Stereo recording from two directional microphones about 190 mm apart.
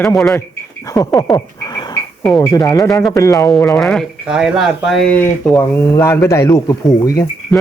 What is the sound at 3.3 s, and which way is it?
A man's voice, centre (ahead or behind).